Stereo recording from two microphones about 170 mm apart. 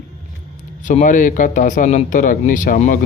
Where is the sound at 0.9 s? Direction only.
50° left (ahead or behind).